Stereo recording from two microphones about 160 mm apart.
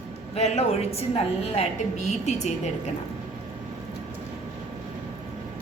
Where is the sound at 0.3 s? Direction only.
40° left (ahead or behind).